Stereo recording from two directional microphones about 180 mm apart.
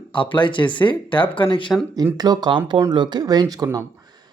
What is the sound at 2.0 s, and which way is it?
Speech, 20° right (ahead or behind).